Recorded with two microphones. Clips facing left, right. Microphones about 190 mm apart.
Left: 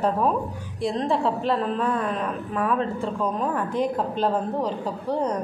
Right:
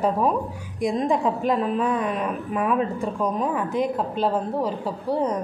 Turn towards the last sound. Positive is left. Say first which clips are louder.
# right 1 dB
turn(degrees=-10)  # may be behind; listen again after turning